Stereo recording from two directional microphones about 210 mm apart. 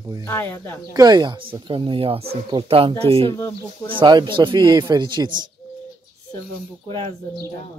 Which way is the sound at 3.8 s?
20° right (ahead or behind).